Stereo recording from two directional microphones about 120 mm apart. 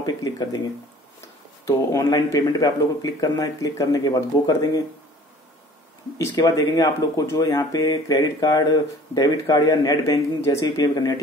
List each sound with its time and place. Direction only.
0.0 s speech: 35° left (ahead or behind)
1.7 s speech: 25° left (ahead or behind)
6.1 s speech: 30° left (ahead or behind)